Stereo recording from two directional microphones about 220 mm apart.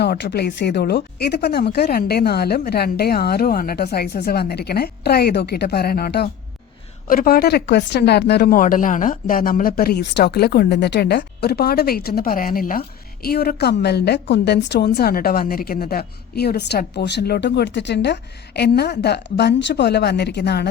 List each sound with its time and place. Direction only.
0.0 s a woman's voice: 50° left (ahead or behind)